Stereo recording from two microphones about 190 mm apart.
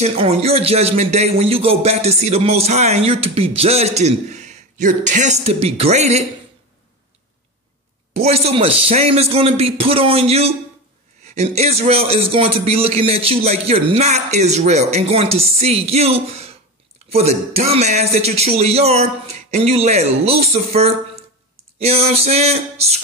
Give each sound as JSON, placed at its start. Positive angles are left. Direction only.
{"t": 0.0, "sound": "speech", "side_deg": -30}
{"t": 8.1, "sound": "speech", "side_deg": -35}